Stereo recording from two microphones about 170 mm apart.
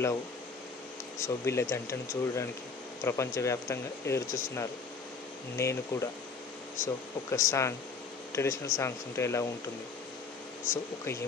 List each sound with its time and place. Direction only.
1.2 s speech: 15° left (ahead or behind)
10.7 s speech: 15° left (ahead or behind)